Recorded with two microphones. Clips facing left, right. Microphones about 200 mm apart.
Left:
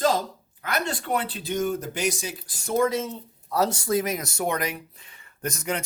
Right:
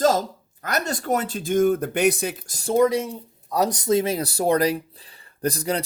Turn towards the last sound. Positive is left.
turn(degrees=-35)  # may be behind; listen again after turning